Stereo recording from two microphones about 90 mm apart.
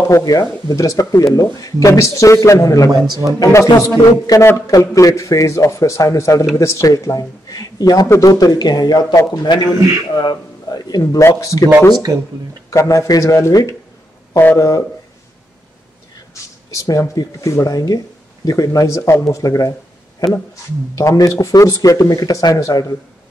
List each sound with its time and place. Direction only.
0.1 s speech: 45° left (ahead or behind)
3.1 s speech: 40° right (ahead or behind)
3.4 s a man's voice: 40° left (ahead or behind)
9.1 s speech: 35° left (ahead or behind)
9.4 s a man's voice: 50° left (ahead or behind)
12.1 s speech: 40° right (ahead or behind)
12.6 s speech: 35° left (ahead or behind)
16.7 s speech: 40° left (ahead or behind)
21.0 s speech: 40° left (ahead or behind)